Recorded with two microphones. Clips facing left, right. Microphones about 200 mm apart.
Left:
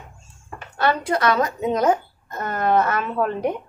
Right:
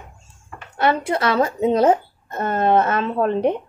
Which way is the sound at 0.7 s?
25° right (ahead or behind).